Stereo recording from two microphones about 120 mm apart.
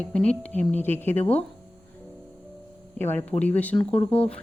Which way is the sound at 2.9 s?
15° left (ahead or behind).